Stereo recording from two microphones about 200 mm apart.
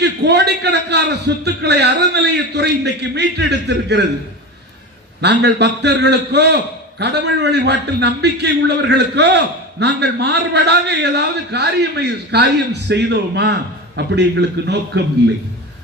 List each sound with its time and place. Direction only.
0.0 s a man's voice: 60° right (ahead or behind)
5.2 s a man's voice: 60° right (ahead or behind)